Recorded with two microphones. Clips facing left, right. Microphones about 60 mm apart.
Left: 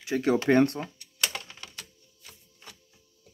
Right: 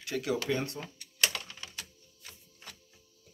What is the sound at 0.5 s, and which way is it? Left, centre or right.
Speech, left.